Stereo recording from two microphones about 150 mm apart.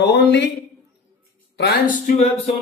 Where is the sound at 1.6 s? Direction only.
80° left.